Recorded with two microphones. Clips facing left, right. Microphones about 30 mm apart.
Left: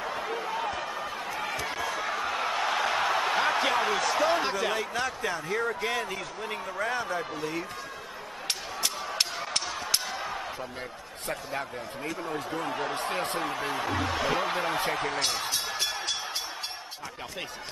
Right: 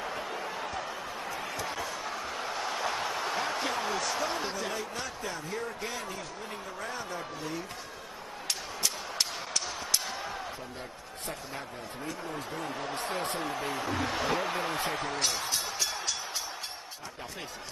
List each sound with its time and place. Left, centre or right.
0.1 s a sound: left
1.4 s run: left
1.8 s speech: left
8.5 s a sound: left
12.5 s a man's voice: left
12.9 s speech: left
13.6 s a man's voice: left
14.3 s basketball bounce: left